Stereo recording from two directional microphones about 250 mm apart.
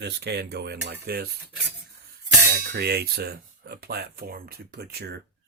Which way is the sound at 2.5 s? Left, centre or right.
Right.